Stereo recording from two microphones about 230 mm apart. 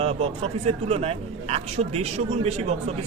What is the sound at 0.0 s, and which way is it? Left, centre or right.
A man's voice, right.